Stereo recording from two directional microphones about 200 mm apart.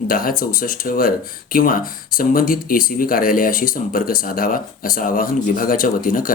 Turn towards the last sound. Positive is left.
turn(degrees=45)  # may be behind; listen again after turning